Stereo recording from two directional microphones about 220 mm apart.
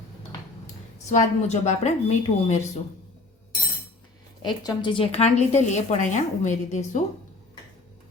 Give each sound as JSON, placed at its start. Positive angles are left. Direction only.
{"t": 1.1, "sound": "a woman's voice", "side_deg": 30}
{"t": 4.4, "sound": "a woman's voice", "side_deg": 20}